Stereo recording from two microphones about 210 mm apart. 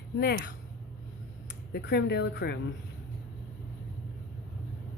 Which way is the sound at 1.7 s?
50° left (ahead or behind).